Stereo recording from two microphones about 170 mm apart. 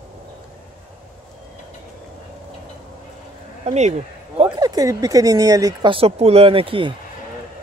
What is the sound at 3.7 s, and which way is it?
Speech, 40° right (ahead or behind).